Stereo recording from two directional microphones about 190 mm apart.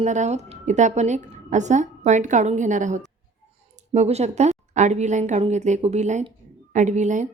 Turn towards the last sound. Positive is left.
turn(degrees=-40)  # may be behind; listen again after turning